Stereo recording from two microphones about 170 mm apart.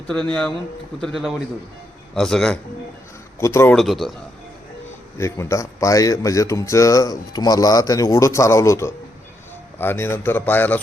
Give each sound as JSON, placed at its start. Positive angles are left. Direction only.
{"t": 0.1, "sound": "a man's voice", "side_deg": 5}
{"t": 3.4, "sound": "a man's voice", "side_deg": 15}
{"t": 3.8, "sound": "a man's voice", "side_deg": 0}
{"t": 5.1, "sound": "a man's voice", "side_deg": 15}